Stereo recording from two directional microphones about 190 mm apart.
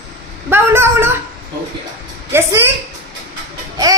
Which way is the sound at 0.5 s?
10° right (ahead or behind).